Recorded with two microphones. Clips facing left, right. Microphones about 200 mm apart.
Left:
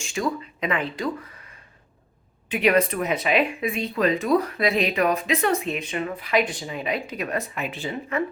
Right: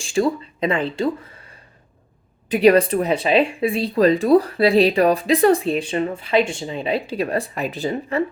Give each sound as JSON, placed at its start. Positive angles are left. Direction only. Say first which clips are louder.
{"t": 0.0, "sound": "speech", "louder": "right 7 dB", "side_deg": -30}